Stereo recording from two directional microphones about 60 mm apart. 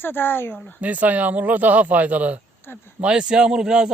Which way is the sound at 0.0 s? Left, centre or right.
Left.